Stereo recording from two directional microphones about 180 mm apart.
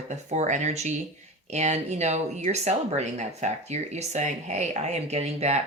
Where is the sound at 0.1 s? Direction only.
40° right (ahead or behind).